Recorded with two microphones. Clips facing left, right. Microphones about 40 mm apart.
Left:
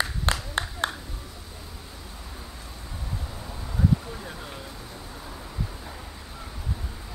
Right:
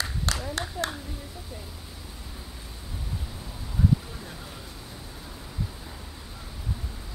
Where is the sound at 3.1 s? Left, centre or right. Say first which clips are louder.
Left 4 dB; centre.